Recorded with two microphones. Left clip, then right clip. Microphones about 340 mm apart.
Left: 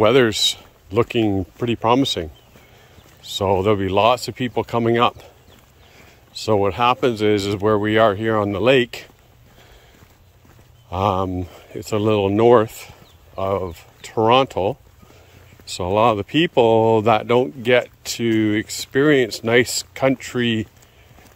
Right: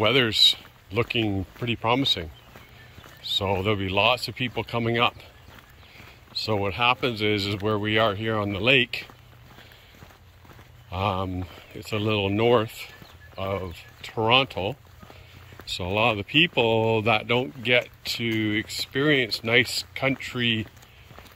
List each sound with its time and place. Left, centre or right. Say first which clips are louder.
0.0 s speech: left 4 dB; centre
3.6 s speech: left 6 dB; centre
6.4 s speech: left 6 dB; centre
10.9 s speech: left 7 dB; centre
15.8 s speech: left 7 dB; centre